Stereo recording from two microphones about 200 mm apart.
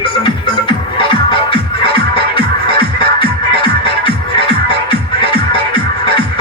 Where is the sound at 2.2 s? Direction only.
25° left (ahead or behind).